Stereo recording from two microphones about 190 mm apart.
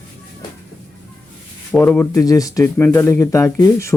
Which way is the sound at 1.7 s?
10° left (ahead or behind).